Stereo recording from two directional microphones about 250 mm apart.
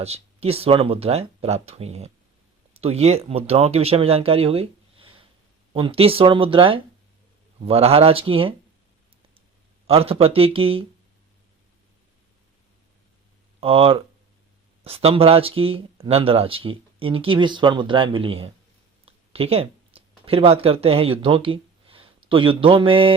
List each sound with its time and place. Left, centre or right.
0.0 s speech: right
9.8 s speech: right
13.6 s speech: right